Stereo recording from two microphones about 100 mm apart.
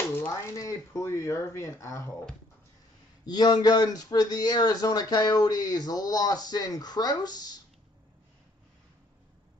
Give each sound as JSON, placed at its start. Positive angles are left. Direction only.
{"t": 0.1, "sound": "a sound", "side_deg": 20}
{"t": 0.6, "sound": "speech", "side_deg": 30}
{"t": 3.3, "sound": "speech", "side_deg": 45}